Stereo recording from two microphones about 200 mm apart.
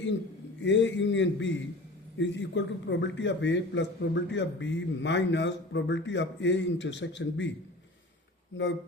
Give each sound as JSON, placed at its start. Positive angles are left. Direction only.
{"t": 0.6, "sound": "a man's voice", "side_deg": 65}